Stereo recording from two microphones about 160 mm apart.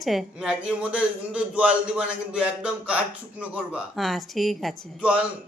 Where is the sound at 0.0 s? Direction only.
Centre (ahead or behind).